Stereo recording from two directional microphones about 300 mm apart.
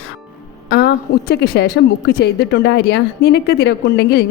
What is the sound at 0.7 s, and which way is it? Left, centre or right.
A woman's voice, left.